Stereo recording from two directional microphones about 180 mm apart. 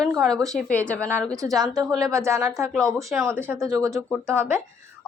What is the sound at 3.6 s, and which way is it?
Speech, 20° right (ahead or behind).